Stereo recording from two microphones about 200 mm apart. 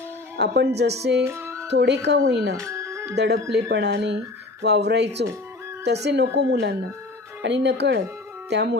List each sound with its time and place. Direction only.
0.3 s speech: 55° right (ahead or behind)
1.2 s music: 15° right (ahead or behind)
1.7 s speech: 60° right (ahead or behind)
2.6 s music: 15° right (ahead or behind)
3.2 s speech: 55° right (ahead or behind)